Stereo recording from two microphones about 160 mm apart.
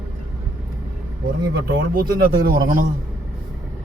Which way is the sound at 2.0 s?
65° right (ahead or behind).